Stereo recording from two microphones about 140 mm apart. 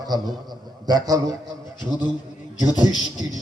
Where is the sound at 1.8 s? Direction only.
30° left (ahead or behind).